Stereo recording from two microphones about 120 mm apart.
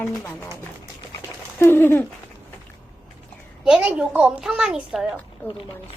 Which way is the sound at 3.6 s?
10° right (ahead or behind).